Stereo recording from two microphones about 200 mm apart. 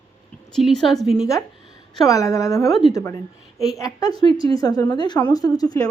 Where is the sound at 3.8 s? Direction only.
15° left (ahead or behind).